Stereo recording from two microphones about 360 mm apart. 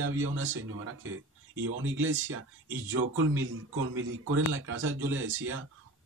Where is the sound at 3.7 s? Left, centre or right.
Right.